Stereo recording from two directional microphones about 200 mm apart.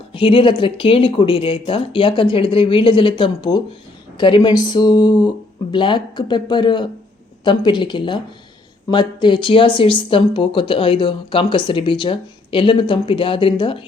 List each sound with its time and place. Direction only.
0.1 s speech: 25° left (ahead or behind)